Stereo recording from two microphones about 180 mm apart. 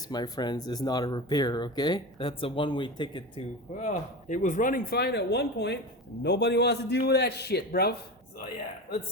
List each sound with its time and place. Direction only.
0.1 s speech: 25° left (ahead or behind)
3.8 s a man's voice: 40° left (ahead or behind); by 7.9 s 60° left (ahead or behind)